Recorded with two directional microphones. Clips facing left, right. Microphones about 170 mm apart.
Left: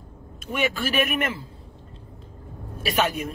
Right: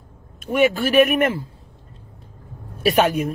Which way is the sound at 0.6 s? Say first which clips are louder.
Right 9 dB; 45° right (ahead or behind).